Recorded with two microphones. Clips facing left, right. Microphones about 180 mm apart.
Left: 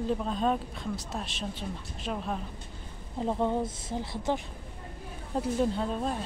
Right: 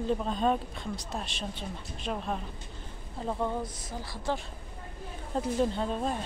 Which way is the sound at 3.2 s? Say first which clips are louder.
Left 4 dB; 20° left (ahead or behind).